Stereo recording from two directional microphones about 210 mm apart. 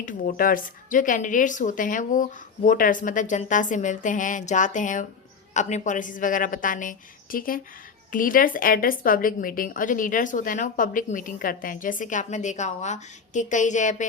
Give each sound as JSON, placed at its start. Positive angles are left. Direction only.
{"t": 0.0, "sound": "a woman's voice", "side_deg": 40}